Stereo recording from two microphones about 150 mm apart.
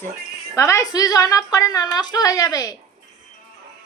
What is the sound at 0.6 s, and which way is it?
A woman's voice, 20° left (ahead or behind).